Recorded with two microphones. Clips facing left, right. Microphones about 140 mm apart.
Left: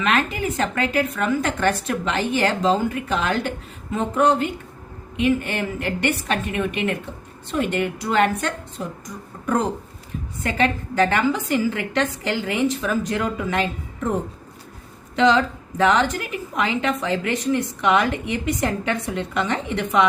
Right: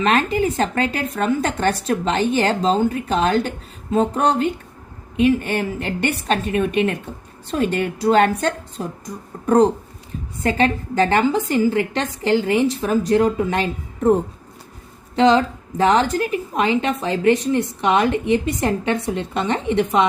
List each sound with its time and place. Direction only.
0.0 s speech: 35° right (ahead or behind)
10.4 s speech: 30° right (ahead or behind)
15.1 s a woman's voice: 35° right (ahead or behind)